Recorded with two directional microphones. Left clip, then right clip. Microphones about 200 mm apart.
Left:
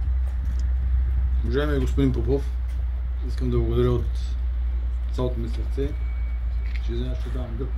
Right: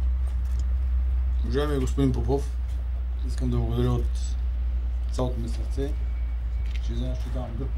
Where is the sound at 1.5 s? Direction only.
15° right (ahead or behind).